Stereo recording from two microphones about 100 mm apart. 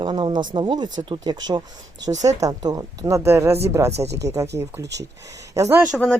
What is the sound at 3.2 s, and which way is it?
Speech, 25° right (ahead or behind).